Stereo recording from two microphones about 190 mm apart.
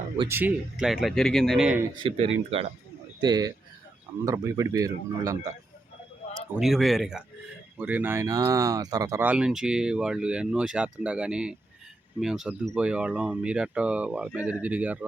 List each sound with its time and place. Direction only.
0.3 s speech: 10° right (ahead or behind)
2.0 s speech: 30° right (ahead or behind)
3.2 s speech: 20° right (ahead or behind)
6.6 s speech: centre (ahead or behind)